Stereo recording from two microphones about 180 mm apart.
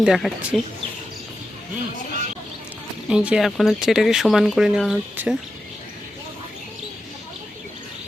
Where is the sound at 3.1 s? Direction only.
5° right (ahead or behind).